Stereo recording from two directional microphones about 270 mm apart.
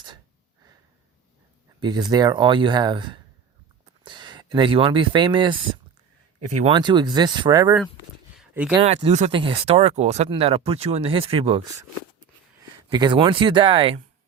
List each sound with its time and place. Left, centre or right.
1.8 s speech: centre
8.4 s a sound: centre
8.8 s speech: right
12.9 s speech: centre